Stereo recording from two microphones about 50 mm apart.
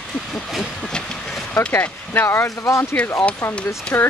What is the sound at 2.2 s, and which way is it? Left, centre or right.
Speech, left.